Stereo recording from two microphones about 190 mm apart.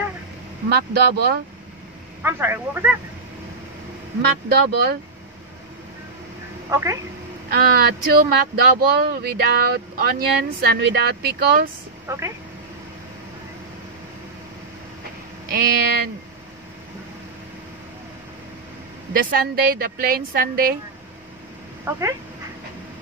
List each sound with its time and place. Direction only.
0.7 s speech: 55° right (ahead or behind)
2.2 s speech: 10° right (ahead or behind)
4.2 s speech: 60° right (ahead or behind)
6.7 s speech: 15° right (ahead or behind)
7.4 s speech: 55° right (ahead or behind)
12.1 s speech: 15° right (ahead or behind)
15.5 s speech: 55° right (ahead or behind)
19.1 s a woman's voice: 50° right (ahead or behind)
21.9 s speech: 10° right (ahead or behind)